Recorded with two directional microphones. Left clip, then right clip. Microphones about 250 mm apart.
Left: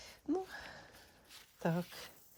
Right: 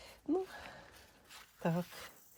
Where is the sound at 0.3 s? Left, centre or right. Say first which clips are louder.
Right 2 dB; centre.